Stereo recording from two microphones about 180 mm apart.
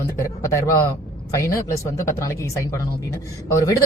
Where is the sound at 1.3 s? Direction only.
15° left (ahead or behind).